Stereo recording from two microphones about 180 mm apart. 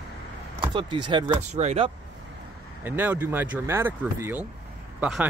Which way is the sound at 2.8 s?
10° right (ahead or behind).